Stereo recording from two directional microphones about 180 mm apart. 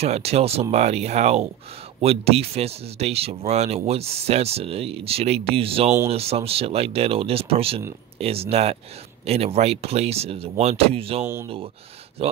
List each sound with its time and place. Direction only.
0.0 s speech: 35° right (ahead or behind)